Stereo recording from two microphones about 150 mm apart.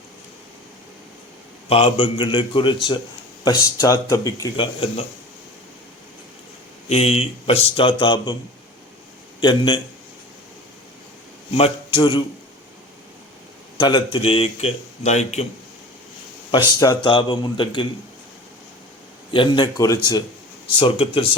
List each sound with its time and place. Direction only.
1.7 s speech: 35° left (ahead or behind)
6.8 s speech: 45° left (ahead or behind)
9.4 s speech: 35° left (ahead or behind)
11.5 s speech: 35° left (ahead or behind)
13.7 s speech: 30° left (ahead or behind); by 15.4 s 45° left (ahead or behind)
16.8 s speech: 30° left (ahead or behind)
19.3 s speech: 35° left (ahead or behind)
20.7 s speech: 35° left (ahead or behind)